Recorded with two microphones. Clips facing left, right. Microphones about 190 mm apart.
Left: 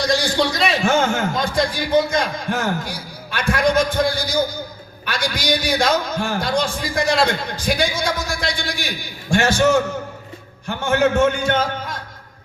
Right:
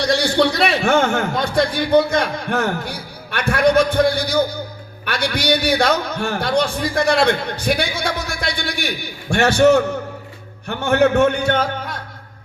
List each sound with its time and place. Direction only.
0.0 s a man's voice: 60° right (ahead or behind)